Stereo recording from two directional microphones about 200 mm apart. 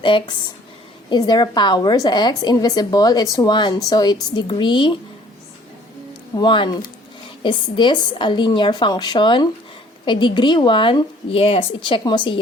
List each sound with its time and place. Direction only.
0.0 s a woman's voice: 25° left (ahead or behind)
6.3 s a woman's voice: 20° left (ahead or behind)